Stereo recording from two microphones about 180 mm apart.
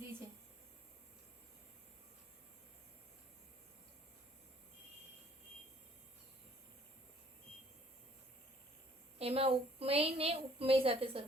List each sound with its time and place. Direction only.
9.1 s a woman's voice: 35° right (ahead or behind)